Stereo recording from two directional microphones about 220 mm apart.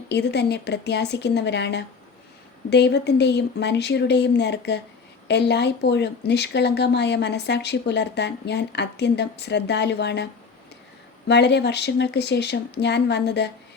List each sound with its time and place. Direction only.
0.1 s speech: 50° left (ahead or behind)
11.3 s speech: 50° left (ahead or behind)